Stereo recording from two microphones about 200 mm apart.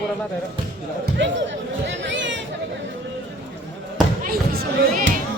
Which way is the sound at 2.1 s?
65° right (ahead or behind).